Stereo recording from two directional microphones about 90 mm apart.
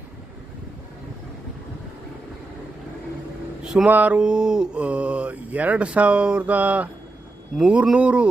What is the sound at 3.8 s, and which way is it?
Speech, 15° right (ahead or behind).